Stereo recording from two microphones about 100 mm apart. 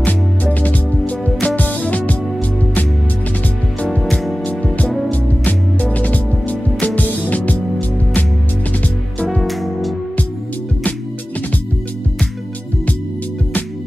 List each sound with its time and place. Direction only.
0.0 s music: 15° left (ahead or behind)
4.0 s music: centre (ahead or behind)
4.5 s music: 15° left (ahead or behind)
9.2 s music: 5° left (ahead or behind)